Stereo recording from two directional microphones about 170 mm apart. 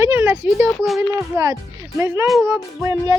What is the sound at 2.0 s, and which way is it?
Speech, 15° right (ahead or behind).